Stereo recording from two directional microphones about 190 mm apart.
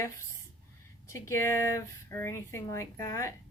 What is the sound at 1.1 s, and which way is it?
A woman's voice, 15° left (ahead or behind).